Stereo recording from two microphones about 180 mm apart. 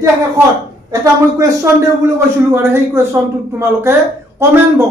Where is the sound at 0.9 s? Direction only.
20° right (ahead or behind).